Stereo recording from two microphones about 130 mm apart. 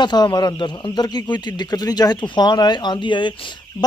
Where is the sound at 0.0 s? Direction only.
35° left (ahead or behind).